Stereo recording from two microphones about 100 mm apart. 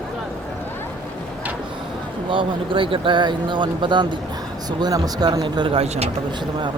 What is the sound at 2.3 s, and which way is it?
Speech, 55° right (ahead or behind).